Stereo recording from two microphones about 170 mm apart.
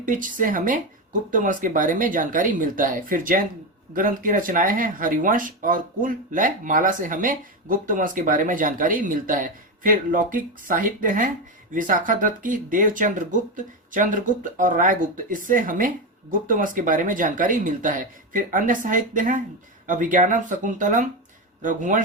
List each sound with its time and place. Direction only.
0.0 s speech: 50° right (ahead or behind)